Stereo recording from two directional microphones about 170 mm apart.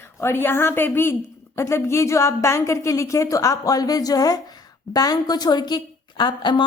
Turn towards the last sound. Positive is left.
turn(degrees=25)  # may be behind; listen again after turning